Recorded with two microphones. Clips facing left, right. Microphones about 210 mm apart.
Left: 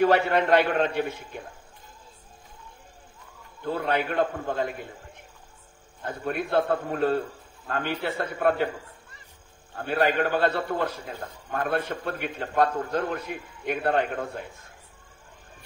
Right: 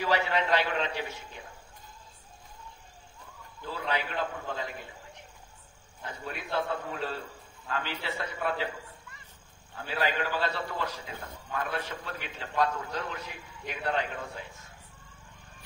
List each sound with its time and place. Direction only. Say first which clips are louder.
0.0 s a man's voice: left 7 dB; 55° left (ahead or behind)
3.6 s a man's voice: left 7 dB; 55° left (ahead or behind)
6.0 s a man's voice: left 9 dB; 55° left (ahead or behind)
9.8 s a man's voice: left 7 dB; 55° left (ahead or behind)